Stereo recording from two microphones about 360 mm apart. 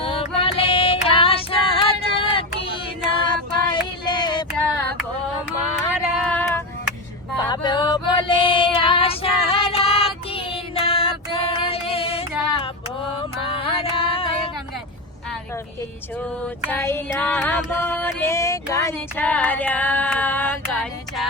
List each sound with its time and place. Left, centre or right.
0.0 s female singing: centre
3.2 s child singing: centre
5.5 s a sound: centre
7.3 s female singing: centre
13.1 s music: centre
16.6 s music: centre